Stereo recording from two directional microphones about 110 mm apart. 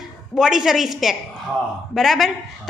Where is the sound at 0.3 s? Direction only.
5° right (ahead or behind).